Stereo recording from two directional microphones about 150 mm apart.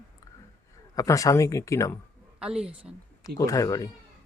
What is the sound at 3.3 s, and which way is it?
Speech, 20° left (ahead or behind).